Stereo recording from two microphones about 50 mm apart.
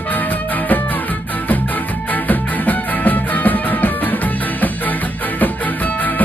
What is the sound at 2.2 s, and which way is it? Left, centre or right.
Music, left.